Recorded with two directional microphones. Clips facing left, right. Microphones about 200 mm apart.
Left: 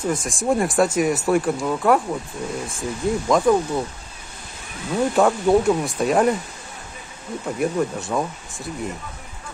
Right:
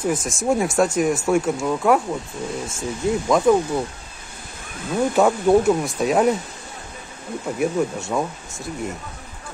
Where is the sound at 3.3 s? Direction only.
5° right (ahead or behind).